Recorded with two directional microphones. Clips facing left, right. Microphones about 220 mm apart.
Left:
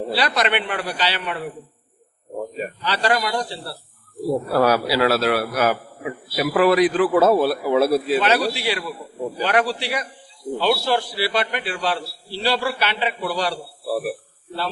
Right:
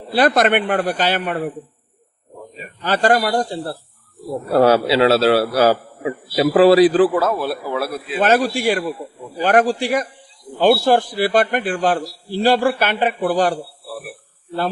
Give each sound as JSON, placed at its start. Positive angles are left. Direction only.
{"t": 0.1, "sound": "a man's voice", "side_deg": -50}
{"t": 2.8, "sound": "a man's voice", "side_deg": -50}
{"t": 4.5, "sound": "a man's voice", "side_deg": -25}
{"t": 7.2, "sound": "a man's voice", "side_deg": 25}
{"t": 7.9, "sound": "a man's voice", "side_deg": 40}
{"t": 8.2, "sound": "a man's voice", "side_deg": -50}